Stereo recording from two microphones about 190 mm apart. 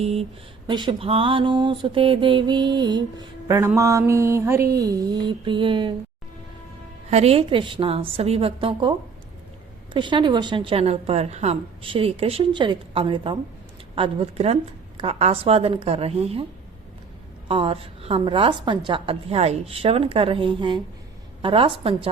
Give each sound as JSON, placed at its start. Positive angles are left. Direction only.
{"t": 0.0, "sound": "a woman's voice", "side_deg": -30}
{"t": 0.7, "sound": "mantra", "side_deg": -25}
{"t": 7.1, "sound": "mantra", "side_deg": -35}
{"t": 13.9, "sound": "a woman's voice", "side_deg": -30}
{"t": 17.5, "sound": "mantra", "side_deg": -30}